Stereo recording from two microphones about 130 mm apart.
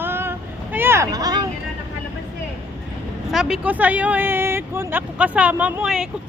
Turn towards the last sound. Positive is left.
turn(degrees=-5)  # may be behind; listen again after turning